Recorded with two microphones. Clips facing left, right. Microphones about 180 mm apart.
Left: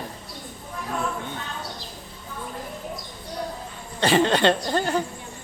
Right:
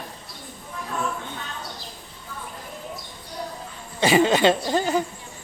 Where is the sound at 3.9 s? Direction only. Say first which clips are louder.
Right 1 dB; 10° right (ahead or behind).